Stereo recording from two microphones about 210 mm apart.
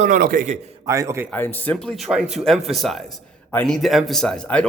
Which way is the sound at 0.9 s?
15° right (ahead or behind).